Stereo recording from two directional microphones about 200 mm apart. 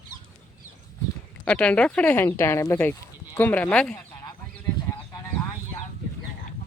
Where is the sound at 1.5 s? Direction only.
5° left (ahead or behind).